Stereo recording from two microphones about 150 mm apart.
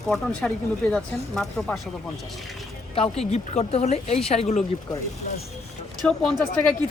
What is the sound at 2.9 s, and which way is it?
Speech, 40° left (ahead or behind).